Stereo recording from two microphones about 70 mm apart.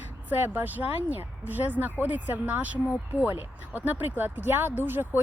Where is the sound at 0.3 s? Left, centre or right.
Right.